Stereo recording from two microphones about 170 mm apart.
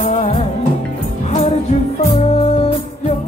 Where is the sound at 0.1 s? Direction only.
35° left (ahead or behind).